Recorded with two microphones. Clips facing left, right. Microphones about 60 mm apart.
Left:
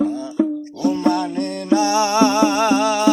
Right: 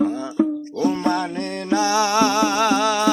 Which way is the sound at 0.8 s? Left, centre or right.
Right.